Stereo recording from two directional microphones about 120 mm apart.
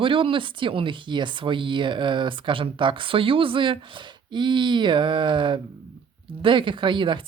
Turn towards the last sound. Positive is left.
turn(degrees=-40)  # may be behind; listen again after turning